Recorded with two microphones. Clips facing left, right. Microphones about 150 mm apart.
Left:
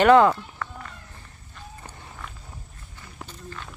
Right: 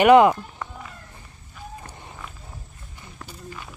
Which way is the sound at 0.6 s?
20° right (ahead or behind).